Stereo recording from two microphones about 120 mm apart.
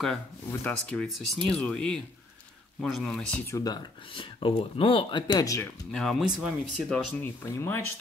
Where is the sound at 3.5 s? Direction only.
30° left (ahead or behind).